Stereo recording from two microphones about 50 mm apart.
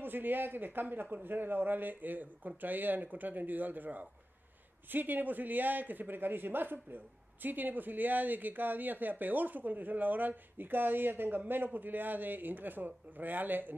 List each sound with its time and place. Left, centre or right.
0.0 s speech: right